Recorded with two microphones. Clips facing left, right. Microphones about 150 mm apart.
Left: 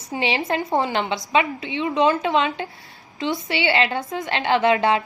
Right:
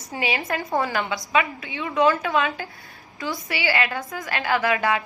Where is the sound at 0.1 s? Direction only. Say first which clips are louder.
Left 3 dB; 25° left (ahead or behind).